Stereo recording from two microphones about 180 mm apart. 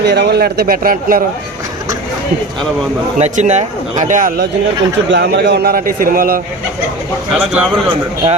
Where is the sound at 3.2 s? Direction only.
40° right (ahead or behind).